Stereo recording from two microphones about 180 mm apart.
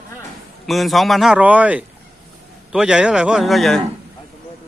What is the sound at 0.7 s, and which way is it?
Speech, centre (ahead or behind).